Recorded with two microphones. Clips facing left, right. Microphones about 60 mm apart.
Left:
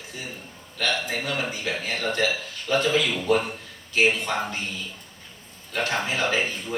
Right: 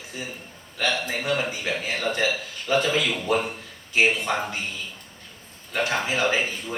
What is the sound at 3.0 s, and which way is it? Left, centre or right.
Speech, centre.